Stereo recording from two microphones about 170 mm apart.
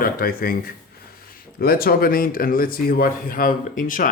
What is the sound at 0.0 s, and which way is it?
Speech, 60° left (ahead or behind).